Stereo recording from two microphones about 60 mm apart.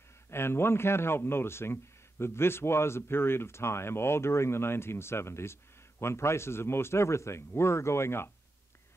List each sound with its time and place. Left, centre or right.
0.3 s speech: left